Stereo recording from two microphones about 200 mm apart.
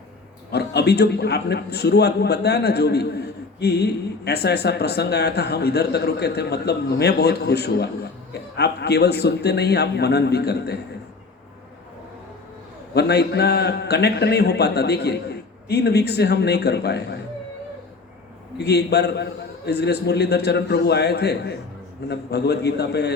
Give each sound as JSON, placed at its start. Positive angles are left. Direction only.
{"t": 0.5, "sound": "a man's voice", "side_deg": 55}
{"t": 12.9, "sound": "a man's voice", "side_deg": 55}
{"t": 18.5, "sound": "a man's voice", "side_deg": 55}